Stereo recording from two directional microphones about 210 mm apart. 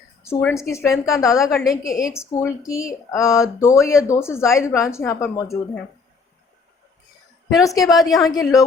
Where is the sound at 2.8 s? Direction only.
15° left (ahead or behind).